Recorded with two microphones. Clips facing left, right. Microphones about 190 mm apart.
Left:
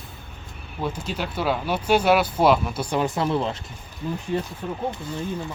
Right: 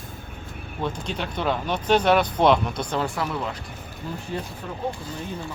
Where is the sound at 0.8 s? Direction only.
5° left (ahead or behind).